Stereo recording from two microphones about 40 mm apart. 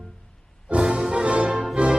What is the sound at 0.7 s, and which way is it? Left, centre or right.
Music, right.